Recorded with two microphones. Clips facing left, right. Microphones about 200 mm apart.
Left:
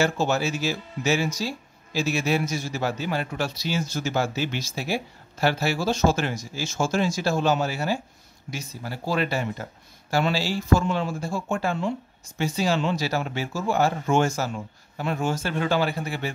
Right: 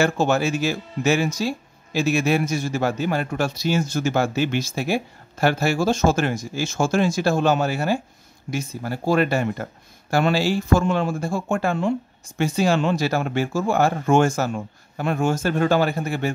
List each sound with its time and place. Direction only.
0.0 s speech: 55° right (ahead or behind)